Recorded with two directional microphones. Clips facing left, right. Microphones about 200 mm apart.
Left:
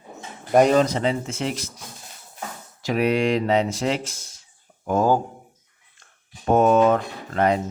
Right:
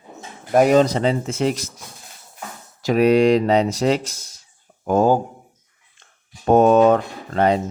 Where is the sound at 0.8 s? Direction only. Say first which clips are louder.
Right 3 dB; 35° right (ahead or behind).